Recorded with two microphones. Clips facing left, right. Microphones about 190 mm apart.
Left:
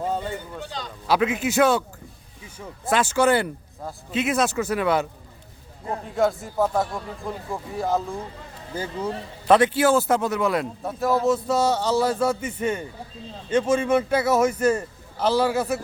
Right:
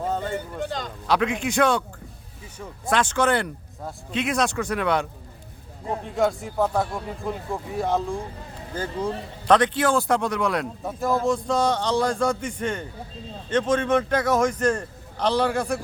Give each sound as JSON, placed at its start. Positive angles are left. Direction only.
{"t": 0.0, "sound": "a sound", "side_deg": 10}
{"t": 0.6, "sound": "speech", "side_deg": -50}
{"t": 1.0, "sound": "a man's voice", "side_deg": 5}
{"t": 6.1, "sound": "a man's voice", "side_deg": 0}